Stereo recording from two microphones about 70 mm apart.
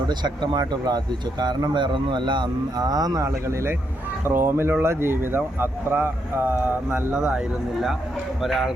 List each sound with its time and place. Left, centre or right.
0.1 s a man's voice: right
4.3 s speech: right
8.4 s speech: centre